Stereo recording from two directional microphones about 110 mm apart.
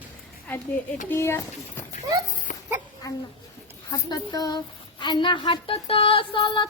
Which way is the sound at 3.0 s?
35° left (ahead or behind).